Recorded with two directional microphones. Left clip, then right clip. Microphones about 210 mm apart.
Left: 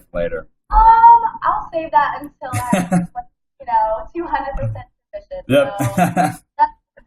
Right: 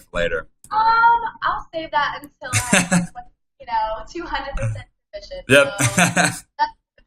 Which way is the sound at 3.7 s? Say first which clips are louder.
Left 6 dB; 45° right (ahead or behind).